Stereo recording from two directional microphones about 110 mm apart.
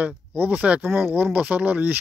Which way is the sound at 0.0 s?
15° right (ahead or behind).